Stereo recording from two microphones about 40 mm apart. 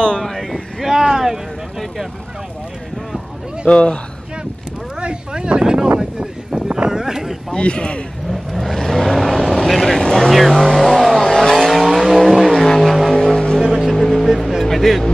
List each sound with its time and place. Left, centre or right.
0.2 s speech: centre
3.6 s speech: left
5.0 s speech: right
5.9 s a sound: centre
7.5 s speech: left
8.3 s vehicle: centre
13.1 s vehicle: centre
13.7 s vehicle: centre
14.6 s music: centre